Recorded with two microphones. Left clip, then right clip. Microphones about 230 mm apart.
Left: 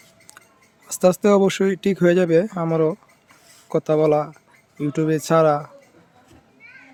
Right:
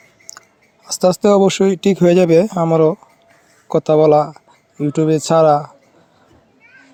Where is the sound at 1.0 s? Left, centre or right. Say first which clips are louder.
Right 4 dB; centre.